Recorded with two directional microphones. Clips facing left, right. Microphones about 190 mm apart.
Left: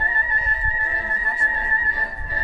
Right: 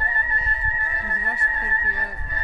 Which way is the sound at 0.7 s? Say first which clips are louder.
Left 1 dB; 30° left (ahead or behind).